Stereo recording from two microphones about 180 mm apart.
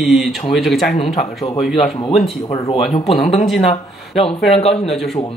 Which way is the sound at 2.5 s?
20° left (ahead or behind).